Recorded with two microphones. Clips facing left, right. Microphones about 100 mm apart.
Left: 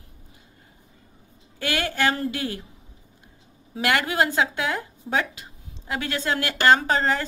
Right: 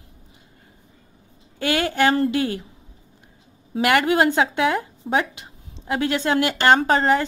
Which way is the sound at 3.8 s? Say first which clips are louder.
Right 5 dB; 20° right (ahead or behind).